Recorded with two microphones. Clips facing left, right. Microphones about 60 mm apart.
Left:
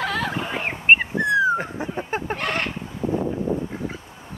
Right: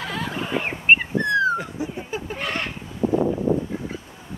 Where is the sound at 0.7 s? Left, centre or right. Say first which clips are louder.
Left 2 dB; centre.